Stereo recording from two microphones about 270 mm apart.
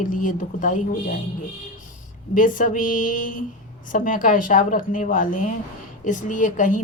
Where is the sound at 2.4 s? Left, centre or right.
Left.